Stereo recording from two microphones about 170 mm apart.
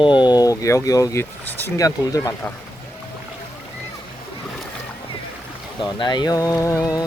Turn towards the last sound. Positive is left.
turn(degrees=20)  # may be behind; listen again after turning